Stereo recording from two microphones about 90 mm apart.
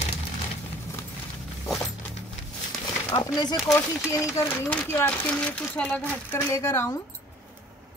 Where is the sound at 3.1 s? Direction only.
55° left (ahead or behind).